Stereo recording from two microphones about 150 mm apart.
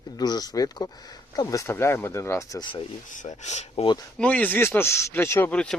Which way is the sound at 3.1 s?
55° left (ahead or behind).